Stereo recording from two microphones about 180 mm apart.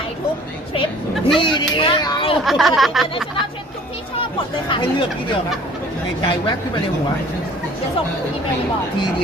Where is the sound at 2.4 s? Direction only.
Centre (ahead or behind).